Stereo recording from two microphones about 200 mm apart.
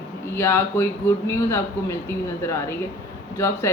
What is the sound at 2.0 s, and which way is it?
Speech, 10° left (ahead or behind).